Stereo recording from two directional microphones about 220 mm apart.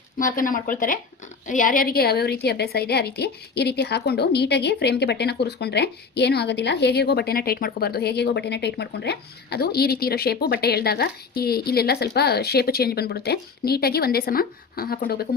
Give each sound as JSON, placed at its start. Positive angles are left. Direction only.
{"t": 0.3, "sound": "a woman's voice", "side_deg": 40}